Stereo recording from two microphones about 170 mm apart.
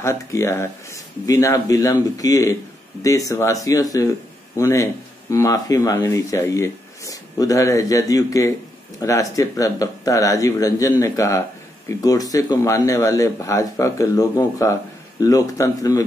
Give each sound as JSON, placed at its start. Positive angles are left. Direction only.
{"t": 0.0, "sound": "speech", "side_deg": 15}